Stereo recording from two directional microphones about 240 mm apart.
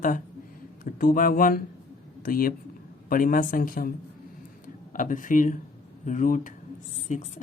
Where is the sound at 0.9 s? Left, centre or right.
Left.